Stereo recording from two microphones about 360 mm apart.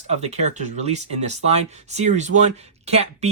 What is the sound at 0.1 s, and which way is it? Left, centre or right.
Speech, centre.